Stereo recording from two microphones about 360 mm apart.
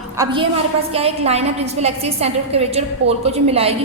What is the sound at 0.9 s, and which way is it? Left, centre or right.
A woman's voice, centre.